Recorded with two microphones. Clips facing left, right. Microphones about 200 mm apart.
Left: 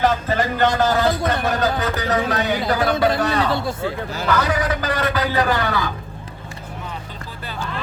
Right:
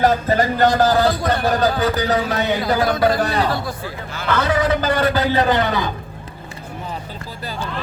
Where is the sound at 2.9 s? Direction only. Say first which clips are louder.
Right 1 dB; 25° left (ahead or behind).